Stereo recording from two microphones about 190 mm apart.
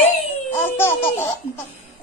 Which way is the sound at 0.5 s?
10° left (ahead or behind).